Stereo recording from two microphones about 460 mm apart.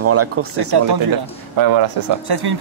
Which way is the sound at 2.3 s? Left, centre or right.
Right.